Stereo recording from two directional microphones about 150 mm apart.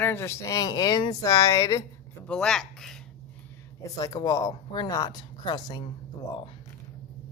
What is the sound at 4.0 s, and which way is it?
Speech, 25° left (ahead or behind).